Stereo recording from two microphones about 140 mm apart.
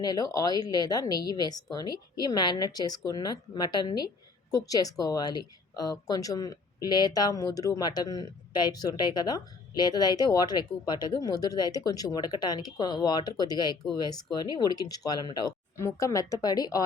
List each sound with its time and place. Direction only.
0.0 s speech: 30° left (ahead or behind)